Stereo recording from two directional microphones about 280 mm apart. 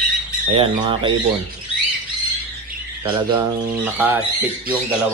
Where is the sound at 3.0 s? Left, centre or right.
Centre.